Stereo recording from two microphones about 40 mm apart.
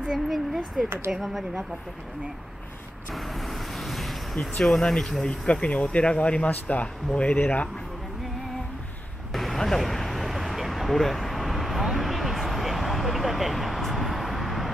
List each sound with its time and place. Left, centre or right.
0.0 s speech: centre
0.8 s speech: right
3.1 s vehicle: centre
4.4 s speech: centre
5.3 s a man's voice: left
9.3 s vehicle: centre